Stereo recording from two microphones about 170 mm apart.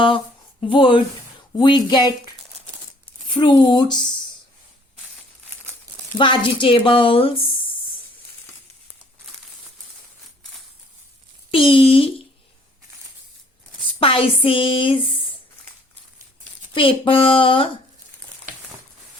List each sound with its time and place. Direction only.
0.6 s speech: 30° left (ahead or behind)
3.2 s speech: 30° left (ahead or behind)
6.1 s speech: 30° left (ahead or behind)
11.5 s speech: 30° left (ahead or behind)
14.0 s speech: 30° left (ahead or behind)
16.7 s speech: 30° left (ahead or behind)